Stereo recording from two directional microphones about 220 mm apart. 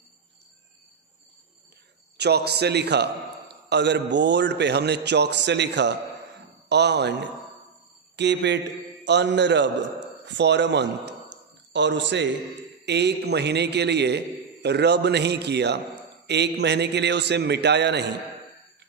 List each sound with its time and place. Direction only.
2.1 s a man's voice: 50° right (ahead or behind)